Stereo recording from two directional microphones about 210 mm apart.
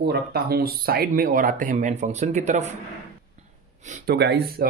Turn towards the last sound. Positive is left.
turn(degrees=-50)  # may be behind; listen again after turning